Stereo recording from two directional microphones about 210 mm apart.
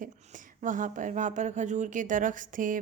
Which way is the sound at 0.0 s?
40° right (ahead or behind).